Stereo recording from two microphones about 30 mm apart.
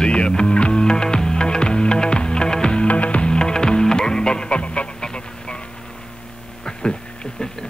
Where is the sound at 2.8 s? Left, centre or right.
Left.